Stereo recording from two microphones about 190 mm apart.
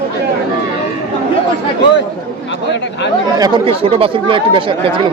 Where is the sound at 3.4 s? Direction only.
25° right (ahead or behind).